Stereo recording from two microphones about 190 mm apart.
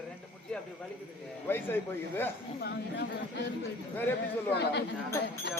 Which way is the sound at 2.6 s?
60° left (ahead or behind).